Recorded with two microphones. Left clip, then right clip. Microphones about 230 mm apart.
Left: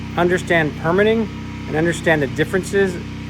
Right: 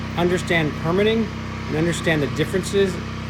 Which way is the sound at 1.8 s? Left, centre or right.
Left.